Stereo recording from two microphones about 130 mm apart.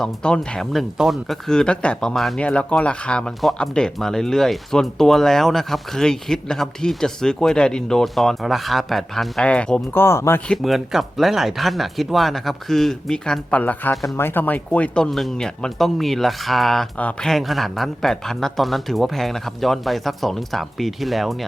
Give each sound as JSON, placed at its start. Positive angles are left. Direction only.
{"t": 0.0, "sound": "speech", "side_deg": 5}
{"t": 10.0, "sound": "speech", "side_deg": 20}
{"t": 10.5, "sound": "speech", "side_deg": 0}
{"t": 13.9, "sound": "speech", "side_deg": 0}
{"t": 14.2, "sound": "speech", "side_deg": 15}